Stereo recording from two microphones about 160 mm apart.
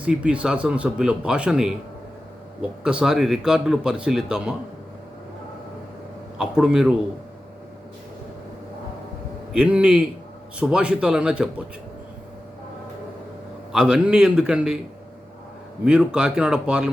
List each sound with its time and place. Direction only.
0.0 s a man's voice: 5° right (ahead or behind)
6.4 s a man's voice: 5° right (ahead or behind)
9.5 s a man's voice: 5° right (ahead or behind)
13.7 s a man's voice: 5° right (ahead or behind)
15.8 s a man's voice: 5° right (ahead or behind)